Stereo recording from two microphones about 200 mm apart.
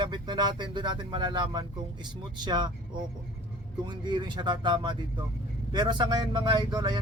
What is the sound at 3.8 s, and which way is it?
Speech, 20° right (ahead or behind).